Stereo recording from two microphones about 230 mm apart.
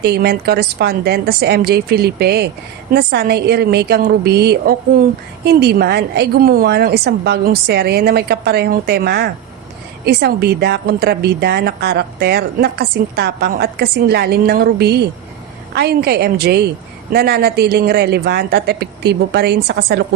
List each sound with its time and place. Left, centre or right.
0.0 s a woman's voice: right